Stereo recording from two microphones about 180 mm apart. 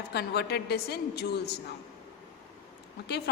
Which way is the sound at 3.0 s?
65° left (ahead or behind).